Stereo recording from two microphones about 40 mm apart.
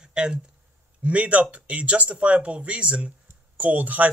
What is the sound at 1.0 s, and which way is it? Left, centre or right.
Speech, right.